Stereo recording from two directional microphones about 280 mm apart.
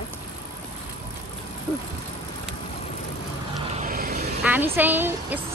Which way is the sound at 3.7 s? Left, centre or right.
Right.